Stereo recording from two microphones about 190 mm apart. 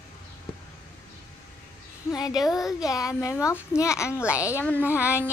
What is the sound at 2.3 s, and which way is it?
Speech, centre (ahead or behind).